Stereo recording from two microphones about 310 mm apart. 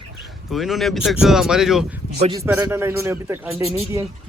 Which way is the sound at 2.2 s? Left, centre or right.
Centre.